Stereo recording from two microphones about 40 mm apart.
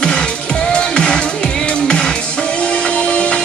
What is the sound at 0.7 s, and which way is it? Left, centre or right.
Music, centre.